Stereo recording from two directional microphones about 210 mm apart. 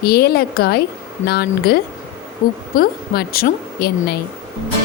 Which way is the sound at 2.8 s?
45° left (ahead or behind).